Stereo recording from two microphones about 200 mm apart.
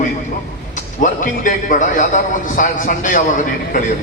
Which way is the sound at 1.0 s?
40° left (ahead or behind).